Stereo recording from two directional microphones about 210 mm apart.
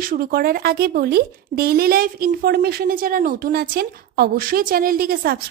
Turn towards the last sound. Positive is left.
turn(degrees=-45)  # may be behind; listen again after turning